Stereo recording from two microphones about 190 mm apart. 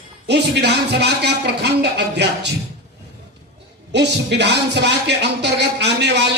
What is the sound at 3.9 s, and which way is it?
Speech, 65° right (ahead or behind).